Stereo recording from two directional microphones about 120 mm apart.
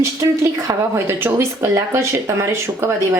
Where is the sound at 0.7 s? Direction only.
20° right (ahead or behind).